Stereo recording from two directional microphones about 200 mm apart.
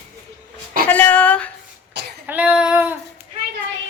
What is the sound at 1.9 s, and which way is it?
Cough, 60° right (ahead or behind).